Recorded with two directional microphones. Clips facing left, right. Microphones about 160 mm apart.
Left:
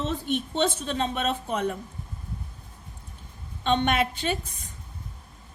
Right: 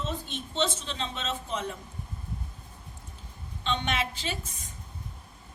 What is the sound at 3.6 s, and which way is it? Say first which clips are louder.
Speech: left 7 dB; 55° left (ahead or behind).